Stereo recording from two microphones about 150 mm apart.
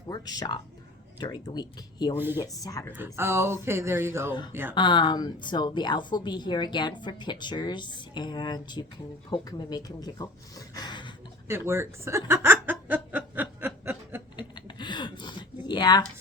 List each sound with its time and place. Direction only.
0.1 s a woman's voice: 25° left (ahead or behind)
2.1 s speech: 15° right (ahead or behind)
2.4 s a woman's voice: 25° left (ahead or behind)
2.9 s speech: 15° right (ahead or behind)
4.7 s a woman's voice: 30° left (ahead or behind)
10.8 s a sound: 30° left (ahead or behind)
11.4 s chuckle: 15° right (ahead or behind)
14.3 s mechanisms: 30° left (ahead or behind)
15.6 s a sound: 30° left (ahead or behind)